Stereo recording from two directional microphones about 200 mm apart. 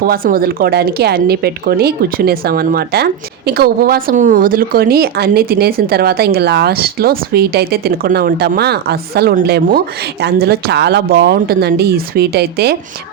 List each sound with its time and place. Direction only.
0.0 s speech: 45° right (ahead or behind)